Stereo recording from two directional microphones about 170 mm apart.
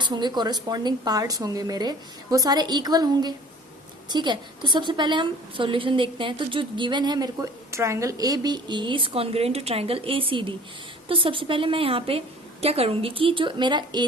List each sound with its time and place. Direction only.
0.0 s a woman's voice: 25° right (ahead or behind)